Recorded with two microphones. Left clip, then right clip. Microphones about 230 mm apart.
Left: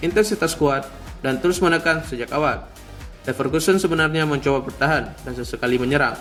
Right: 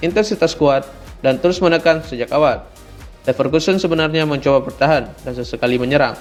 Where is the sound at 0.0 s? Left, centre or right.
Centre.